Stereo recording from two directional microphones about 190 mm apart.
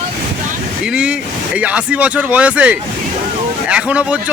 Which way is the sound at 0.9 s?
5° right (ahead or behind).